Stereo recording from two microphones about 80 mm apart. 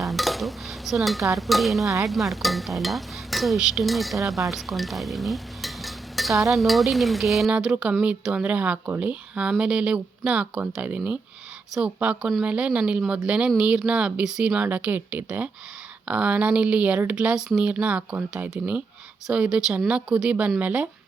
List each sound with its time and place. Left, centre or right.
0.0 s stir: centre
4.4 s dishes: centre
6.5 s stir: centre
7.5 s speech: centre